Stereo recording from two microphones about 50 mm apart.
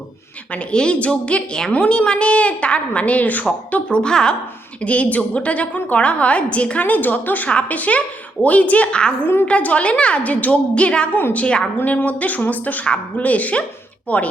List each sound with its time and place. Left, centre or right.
0.5 s a woman's voice: left
4.8 s a woman's voice: left
12.0 s a woman's voice: left